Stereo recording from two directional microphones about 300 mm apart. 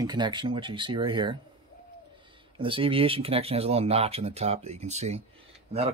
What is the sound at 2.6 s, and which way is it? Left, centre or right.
Speech, centre.